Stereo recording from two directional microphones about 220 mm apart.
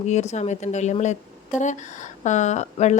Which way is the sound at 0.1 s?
30° left (ahead or behind).